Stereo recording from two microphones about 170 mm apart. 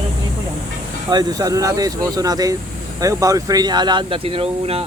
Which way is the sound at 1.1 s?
25° right (ahead or behind).